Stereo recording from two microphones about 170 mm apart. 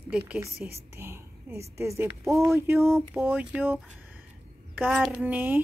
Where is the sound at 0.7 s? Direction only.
15° right (ahead or behind).